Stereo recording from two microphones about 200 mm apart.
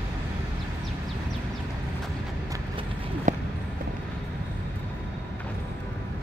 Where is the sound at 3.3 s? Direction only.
40° right (ahead or behind).